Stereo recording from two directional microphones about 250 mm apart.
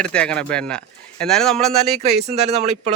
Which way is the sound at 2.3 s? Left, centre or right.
Right.